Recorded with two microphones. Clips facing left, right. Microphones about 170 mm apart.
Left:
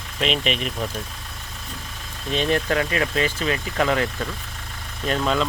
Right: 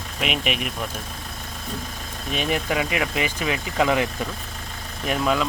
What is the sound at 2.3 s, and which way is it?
Speech, 10° right (ahead or behind).